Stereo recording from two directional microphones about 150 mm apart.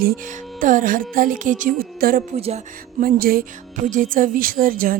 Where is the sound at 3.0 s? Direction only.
75° right (ahead or behind).